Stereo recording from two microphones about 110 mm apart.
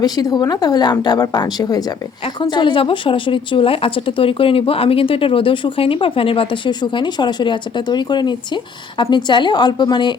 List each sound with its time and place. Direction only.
0.0 s a woman's voice: 35° left (ahead or behind)